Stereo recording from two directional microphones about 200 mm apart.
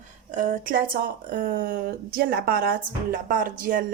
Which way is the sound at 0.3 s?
40° right (ahead or behind).